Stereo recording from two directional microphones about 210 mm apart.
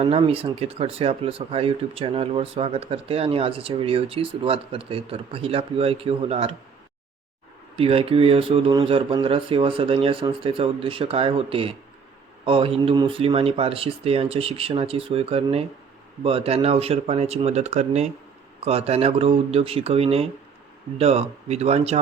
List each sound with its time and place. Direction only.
0.0 s speech: 25° right (ahead or behind)
7.8 s speech: 25° right (ahead or behind)